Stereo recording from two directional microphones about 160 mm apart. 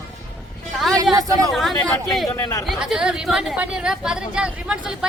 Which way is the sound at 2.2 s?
20° left (ahead or behind).